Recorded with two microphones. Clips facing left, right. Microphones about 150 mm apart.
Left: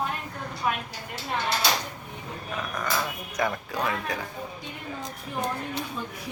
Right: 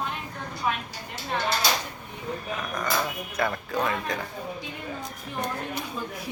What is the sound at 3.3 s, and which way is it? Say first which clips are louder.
Speech: even; 15° left (ahead or behind).